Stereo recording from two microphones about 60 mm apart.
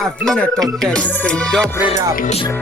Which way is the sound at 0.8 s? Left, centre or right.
Centre.